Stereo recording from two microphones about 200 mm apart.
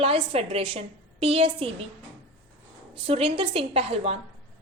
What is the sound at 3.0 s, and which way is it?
A woman's voice, 30° right (ahead or behind).